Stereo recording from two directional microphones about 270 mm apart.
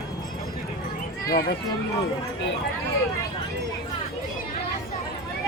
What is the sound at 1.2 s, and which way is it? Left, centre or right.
Speech, left.